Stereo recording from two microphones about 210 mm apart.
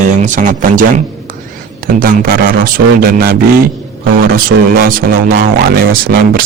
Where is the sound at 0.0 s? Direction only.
35° right (ahead or behind).